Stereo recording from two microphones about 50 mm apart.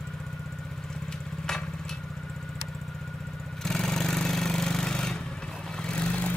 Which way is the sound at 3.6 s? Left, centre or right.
Centre.